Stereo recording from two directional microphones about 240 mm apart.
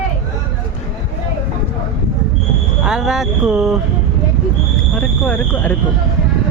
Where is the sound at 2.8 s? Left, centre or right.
Centre.